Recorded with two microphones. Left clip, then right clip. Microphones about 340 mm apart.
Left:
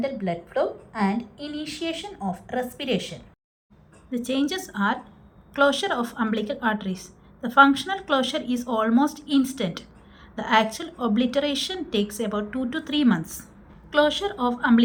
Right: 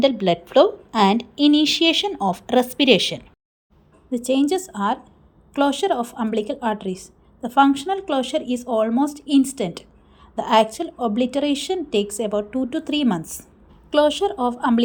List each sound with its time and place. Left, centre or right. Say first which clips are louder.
1.1 s a woman's voice: right 15 dB; centre
4.1 s a woman's voice: right 6 dB; centre